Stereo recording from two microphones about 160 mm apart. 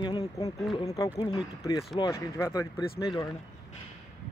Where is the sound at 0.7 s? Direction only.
20° left (ahead or behind).